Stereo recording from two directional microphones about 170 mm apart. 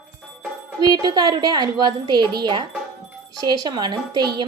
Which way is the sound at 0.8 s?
25° right (ahead or behind).